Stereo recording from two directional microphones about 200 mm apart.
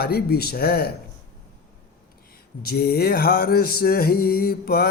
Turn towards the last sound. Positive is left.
turn(degrees=50)  # may be behind; listen again after turning